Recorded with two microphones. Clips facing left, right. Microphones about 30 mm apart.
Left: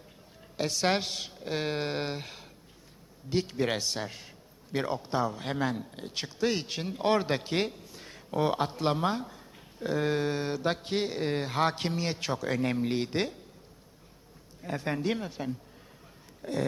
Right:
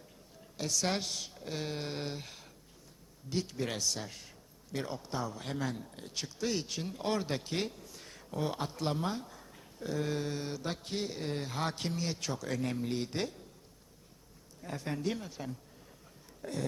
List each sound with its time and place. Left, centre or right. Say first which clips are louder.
0.5 s a man's voice: left 6 dB; left
14.6 s a man's voice: left 5 dB; left